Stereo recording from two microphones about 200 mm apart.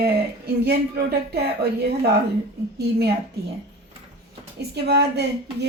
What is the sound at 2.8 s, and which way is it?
Speech, 55° right (ahead or behind).